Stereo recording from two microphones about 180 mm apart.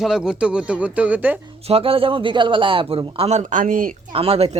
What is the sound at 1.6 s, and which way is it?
A man's voice, 30° right (ahead or behind).